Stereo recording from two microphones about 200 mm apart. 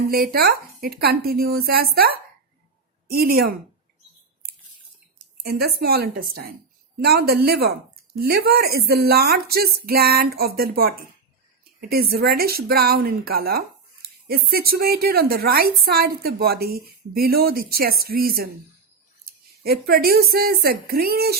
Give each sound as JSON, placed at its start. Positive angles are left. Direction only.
{"t": 0.1, "sound": "speech", "side_deg": -50}
{"t": 5.4, "sound": "speech", "side_deg": -55}